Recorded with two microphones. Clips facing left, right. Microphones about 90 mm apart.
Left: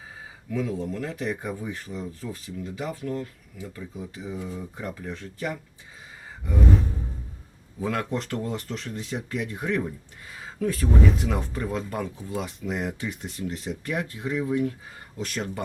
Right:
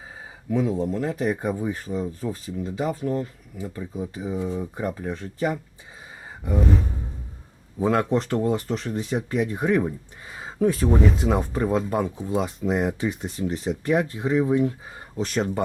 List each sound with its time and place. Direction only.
0.5 s speech: 25° right (ahead or behind)
7.8 s speech: 30° right (ahead or behind)